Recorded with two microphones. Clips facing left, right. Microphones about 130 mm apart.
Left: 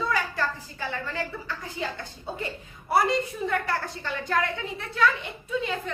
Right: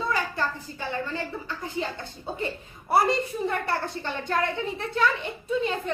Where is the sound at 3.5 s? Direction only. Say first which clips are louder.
Even; 25° right (ahead or behind).